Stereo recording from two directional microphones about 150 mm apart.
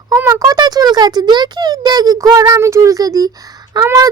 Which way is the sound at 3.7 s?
20° right (ahead or behind).